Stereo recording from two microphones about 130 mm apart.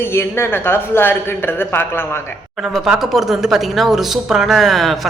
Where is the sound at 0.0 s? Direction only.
20° left (ahead or behind).